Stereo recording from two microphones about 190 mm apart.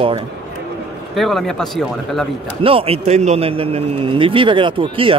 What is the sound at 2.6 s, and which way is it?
A man's voice, 30° right (ahead or behind).